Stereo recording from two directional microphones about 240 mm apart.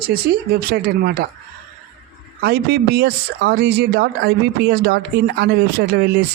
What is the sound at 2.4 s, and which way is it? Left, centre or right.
Speech, right.